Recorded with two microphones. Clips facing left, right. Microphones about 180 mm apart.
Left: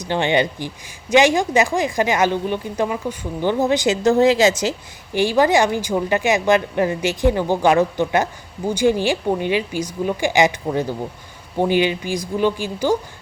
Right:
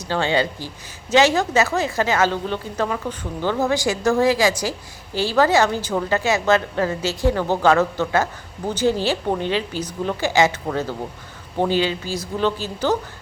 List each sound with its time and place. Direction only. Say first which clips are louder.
0.0 s a woman's voice: left 2 dB; 20° left (ahead or behind)